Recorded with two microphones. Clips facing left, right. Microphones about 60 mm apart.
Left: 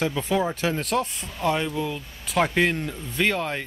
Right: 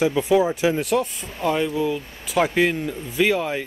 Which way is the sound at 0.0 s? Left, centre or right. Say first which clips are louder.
Right 6 dB; centre.